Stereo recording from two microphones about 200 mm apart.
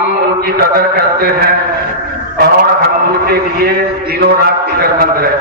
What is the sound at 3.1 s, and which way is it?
A man's voice, 50° right (ahead or behind).